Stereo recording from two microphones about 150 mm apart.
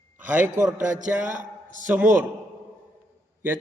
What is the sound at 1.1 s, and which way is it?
Speech, 15° right (ahead or behind).